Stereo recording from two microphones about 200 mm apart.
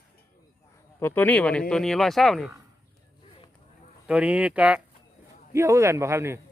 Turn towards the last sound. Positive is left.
turn(degrees=-15)  # may be behind; listen again after turning